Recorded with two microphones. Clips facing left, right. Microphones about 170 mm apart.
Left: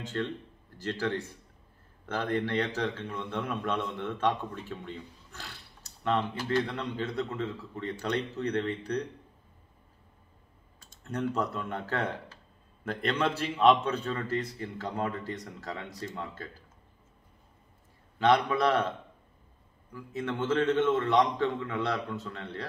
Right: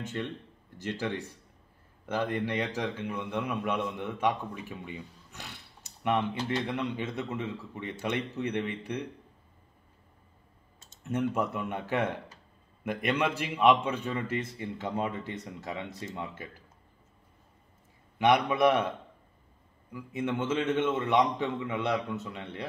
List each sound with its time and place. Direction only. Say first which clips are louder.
0.0 s a man's voice: left 2 dB; 15° right (ahead or behind)
10.8 s a man's voice: right 3 dB; 20° right (ahead or behind)
18.2 s a man's voice: right 1 dB; 15° right (ahead or behind)
19.9 s a man's voice: right 2 dB; 15° right (ahead or behind)